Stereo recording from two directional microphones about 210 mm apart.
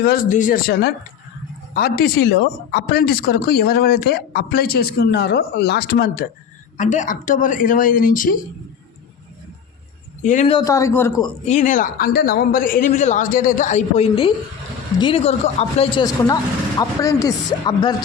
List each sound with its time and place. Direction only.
0.0 s speech: 45° left (ahead or behind)
10.2 s speech: 35° left (ahead or behind)
10.5 s speech: 15° left (ahead or behind)
11.4 s speech: 35° left (ahead or behind); by 17.9 s 20° left (ahead or behind)